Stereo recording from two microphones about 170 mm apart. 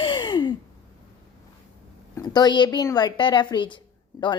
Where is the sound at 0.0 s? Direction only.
25° left (ahead or behind).